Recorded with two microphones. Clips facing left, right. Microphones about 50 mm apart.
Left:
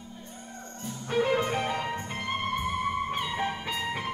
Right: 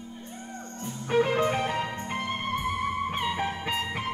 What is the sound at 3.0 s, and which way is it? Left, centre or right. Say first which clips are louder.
Music: right 1 dB; centre.